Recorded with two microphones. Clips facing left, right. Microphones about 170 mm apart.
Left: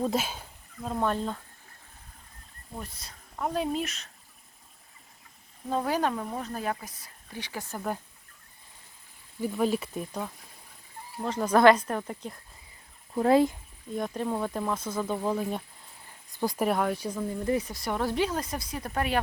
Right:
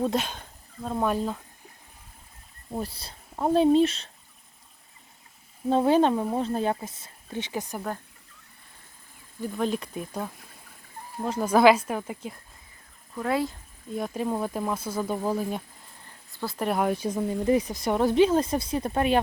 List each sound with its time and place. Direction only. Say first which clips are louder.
0.0 s a sound: right 2 dB; centre (ahead or behind)
0.9 s speech: right 2 dB; 10° right (ahead or behind)
2.7 s speech: right 8 dB; 35° right (ahead or behind)
5.6 s speech: right 7 dB; 25° right (ahead or behind)
9.4 s speech: left 1 dB; 5° left (ahead or behind)
11.2 s speech: right 1 dB; 10° right (ahead or behind)
13.1 s speech: left 6 dB; 30° left (ahead or behind)
13.9 s speech: right 2 dB; 5° right (ahead or behind)
16.3 s speech: left 3 dB; 15° left (ahead or behind)
16.7 s speech: right 3 dB; 20° right (ahead or behind)